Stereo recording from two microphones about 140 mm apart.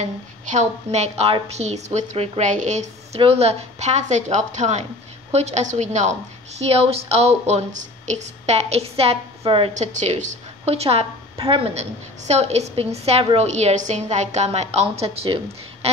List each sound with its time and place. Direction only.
0.0 s a woman's voice: 55° right (ahead or behind)
3.2 s a woman's voice: 45° right (ahead or behind)
6.6 s a woman's voice: 45° right (ahead or behind)
9.8 s a woman's voice: 55° right (ahead or behind)